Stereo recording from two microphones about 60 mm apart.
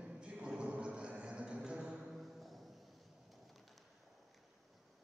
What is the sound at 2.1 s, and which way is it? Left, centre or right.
Music, centre.